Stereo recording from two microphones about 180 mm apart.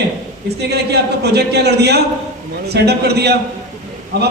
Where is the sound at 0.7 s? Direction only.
65° right (ahead or behind).